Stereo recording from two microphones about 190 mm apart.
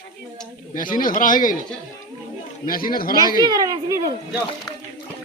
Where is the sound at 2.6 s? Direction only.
50° left (ahead or behind).